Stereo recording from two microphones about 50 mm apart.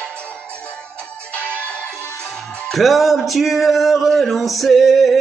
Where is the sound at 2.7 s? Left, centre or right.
Centre.